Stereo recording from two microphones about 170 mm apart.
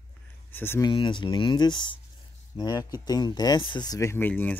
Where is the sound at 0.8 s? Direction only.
30° left (ahead or behind).